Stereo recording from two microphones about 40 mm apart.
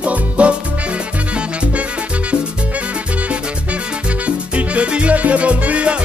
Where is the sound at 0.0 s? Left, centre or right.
Right.